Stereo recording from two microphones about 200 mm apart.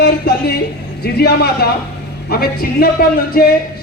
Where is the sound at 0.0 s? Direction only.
55° left (ahead or behind).